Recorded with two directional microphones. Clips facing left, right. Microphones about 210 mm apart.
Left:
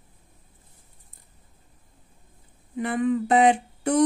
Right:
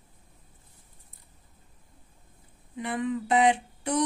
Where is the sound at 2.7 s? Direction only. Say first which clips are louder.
Left 6 dB; 50° left (ahead or behind).